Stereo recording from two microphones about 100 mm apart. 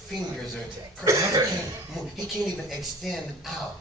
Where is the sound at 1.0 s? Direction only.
35° right (ahead or behind).